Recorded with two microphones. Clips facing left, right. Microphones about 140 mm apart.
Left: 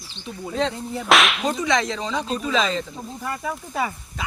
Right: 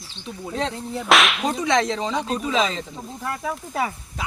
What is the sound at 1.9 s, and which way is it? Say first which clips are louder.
Speech: right 2 dB; 20° right (ahead or behind).